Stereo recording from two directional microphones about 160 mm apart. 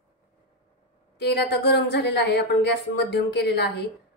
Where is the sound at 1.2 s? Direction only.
90° left.